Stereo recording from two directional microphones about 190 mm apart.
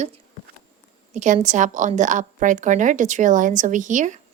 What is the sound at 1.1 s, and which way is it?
A woman's voice, 40° right (ahead or behind).